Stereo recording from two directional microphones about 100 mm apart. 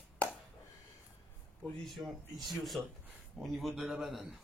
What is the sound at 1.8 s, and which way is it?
Speech, centre (ahead or behind).